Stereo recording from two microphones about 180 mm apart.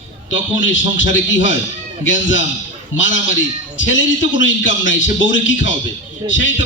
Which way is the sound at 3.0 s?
90° left.